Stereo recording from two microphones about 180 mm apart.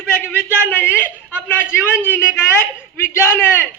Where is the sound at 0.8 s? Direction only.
10° left (ahead or behind).